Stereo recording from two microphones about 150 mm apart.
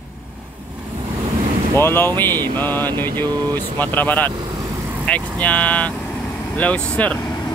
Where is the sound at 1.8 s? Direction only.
15° left (ahead or behind).